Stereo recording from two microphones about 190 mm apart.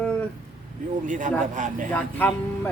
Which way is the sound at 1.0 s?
40° right (ahead or behind).